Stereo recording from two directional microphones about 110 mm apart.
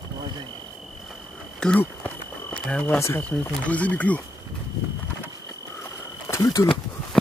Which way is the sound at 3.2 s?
10° left (ahead or behind).